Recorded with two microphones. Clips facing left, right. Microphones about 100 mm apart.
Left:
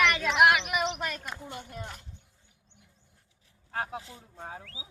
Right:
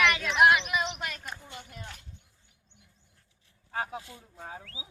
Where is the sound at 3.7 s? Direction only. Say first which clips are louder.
Even; centre (ahead or behind).